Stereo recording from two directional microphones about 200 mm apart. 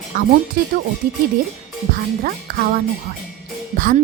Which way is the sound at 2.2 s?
45° right (ahead or behind).